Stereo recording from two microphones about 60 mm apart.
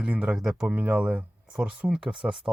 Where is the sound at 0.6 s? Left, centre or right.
Right.